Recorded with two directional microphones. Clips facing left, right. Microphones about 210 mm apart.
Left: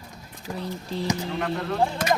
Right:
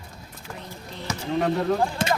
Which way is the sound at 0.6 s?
35° left (ahead or behind).